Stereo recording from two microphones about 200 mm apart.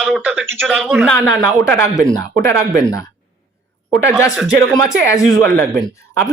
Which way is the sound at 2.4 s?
15° left (ahead or behind).